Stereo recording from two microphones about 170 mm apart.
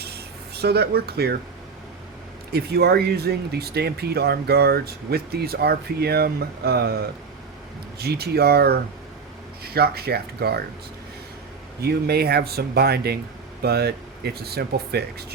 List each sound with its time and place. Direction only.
0.0 s a sound: 70° right (ahead or behind)
2.5 s speech: 70° right (ahead or behind)
11.8 s speech: 70° right (ahead or behind)